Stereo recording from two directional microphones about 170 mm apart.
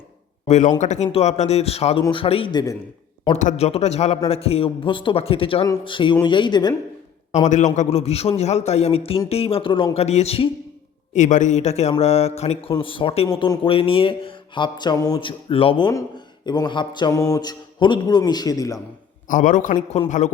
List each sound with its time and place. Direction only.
0.4 s a man's voice: 45° left (ahead or behind); by 2.7 s 25° left (ahead or behind)
3.3 s a man's voice: 40° left (ahead or behind); by 6.7 s 25° left (ahead or behind)
7.3 s a man's voice: 45° left (ahead or behind); by 18.8 s 20° left (ahead or behind)
19.3 s a man's voice: 50° left (ahead or behind)